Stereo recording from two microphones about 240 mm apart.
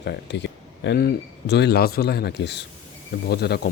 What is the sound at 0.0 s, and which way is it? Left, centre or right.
Speech, left.